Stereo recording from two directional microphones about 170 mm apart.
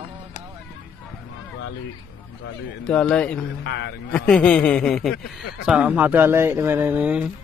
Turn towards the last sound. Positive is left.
turn(degrees=-10)  # may be behind; listen again after turning